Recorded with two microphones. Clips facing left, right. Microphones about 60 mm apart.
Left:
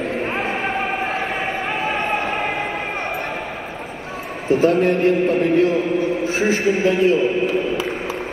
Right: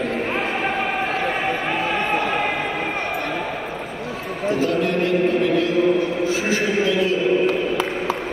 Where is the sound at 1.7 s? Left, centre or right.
Left.